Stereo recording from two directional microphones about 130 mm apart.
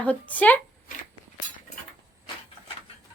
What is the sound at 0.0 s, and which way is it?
Speech, 10° left (ahead or behind).